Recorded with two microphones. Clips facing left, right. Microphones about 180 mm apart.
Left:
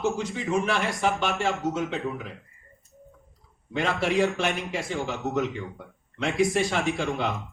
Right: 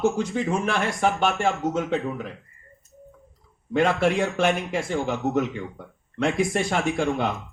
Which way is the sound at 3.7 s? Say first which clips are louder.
Right 4 dB; 55° right (ahead or behind).